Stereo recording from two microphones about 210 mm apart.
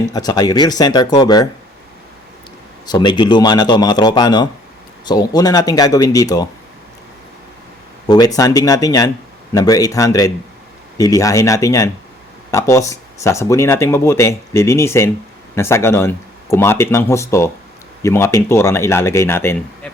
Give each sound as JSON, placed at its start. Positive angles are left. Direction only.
{"t": 0.1, "sound": "a man's voice", "side_deg": 20}
{"t": 2.8, "sound": "a man's voice", "side_deg": 20}
{"t": 8.0, "sound": "speech", "side_deg": 20}